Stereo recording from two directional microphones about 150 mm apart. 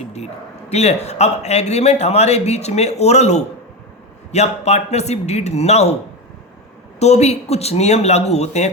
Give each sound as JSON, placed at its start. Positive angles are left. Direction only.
{"t": 0.0, "sound": "bow-wow", "side_deg": 45}
{"t": 0.7, "sound": "speech", "side_deg": 45}
{"t": 7.0, "sound": "speech", "side_deg": 45}